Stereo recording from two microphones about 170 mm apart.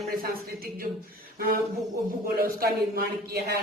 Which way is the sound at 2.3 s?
60° right (ahead or behind).